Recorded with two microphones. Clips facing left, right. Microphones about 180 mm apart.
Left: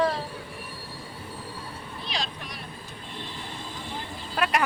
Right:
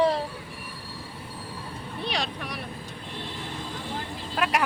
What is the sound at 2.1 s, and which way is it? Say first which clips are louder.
Speech: right 4 dB; 65° right (ahead or behind).